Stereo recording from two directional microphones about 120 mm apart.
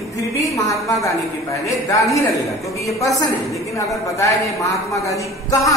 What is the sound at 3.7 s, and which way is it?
A man's voice, 25° left (ahead or behind).